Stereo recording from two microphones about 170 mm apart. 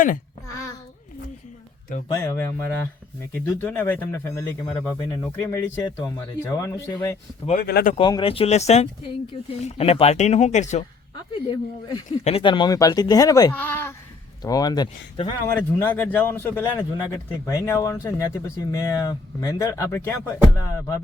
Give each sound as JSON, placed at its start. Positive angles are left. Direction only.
{"t": 2.0, "sound": "a man's voice", "side_deg": 15}
{"t": 7.6, "sound": "speech", "side_deg": 65}
{"t": 7.9, "sound": "speech", "side_deg": 30}
{"t": 11.3, "sound": "speech", "side_deg": 30}
{"t": 14.4, "sound": "speech", "side_deg": 20}
{"t": 15.5, "sound": "a man's voice", "side_deg": 15}